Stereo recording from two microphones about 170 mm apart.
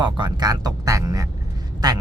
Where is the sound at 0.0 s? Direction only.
25° right (ahead or behind).